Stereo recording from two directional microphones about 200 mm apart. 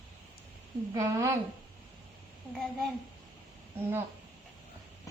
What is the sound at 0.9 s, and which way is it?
Speech, 15° right (ahead or behind).